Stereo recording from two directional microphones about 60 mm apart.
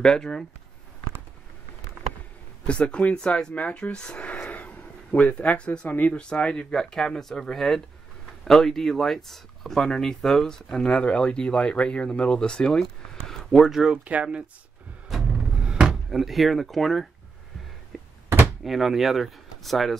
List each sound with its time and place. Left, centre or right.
0.0 s speech: centre
2.6 s speech: centre
6.1 s speech: centre
13.5 s speech: centre
14.0 s speech: centre
15.0 s a sound: centre
15.3 s a sound: centre
15.9 s speech: centre
17.9 s a sound: centre
18.6 s speech: centre